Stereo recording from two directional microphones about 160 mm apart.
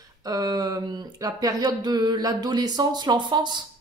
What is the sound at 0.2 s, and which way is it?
Speech, 25° right (ahead or behind).